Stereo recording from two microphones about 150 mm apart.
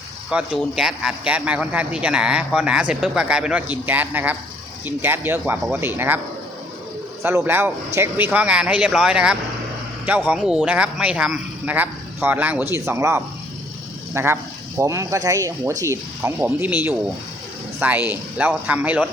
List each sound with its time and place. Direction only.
0.3 s a man's voice: 5° right (ahead or behind)
7.2 s a man's voice: 15° right (ahead or behind)